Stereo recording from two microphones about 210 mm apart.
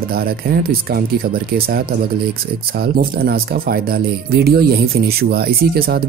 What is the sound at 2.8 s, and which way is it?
Speech, 45° right (ahead or behind).